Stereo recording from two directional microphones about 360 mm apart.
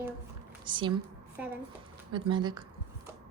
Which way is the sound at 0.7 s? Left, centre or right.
Centre.